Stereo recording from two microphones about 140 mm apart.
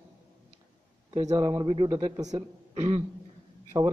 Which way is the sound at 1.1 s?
25° right (ahead or behind).